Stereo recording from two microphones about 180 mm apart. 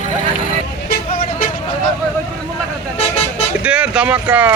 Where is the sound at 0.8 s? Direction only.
55° left (ahead or behind).